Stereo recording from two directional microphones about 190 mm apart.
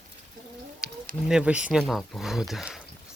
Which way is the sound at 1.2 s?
5° right (ahead or behind).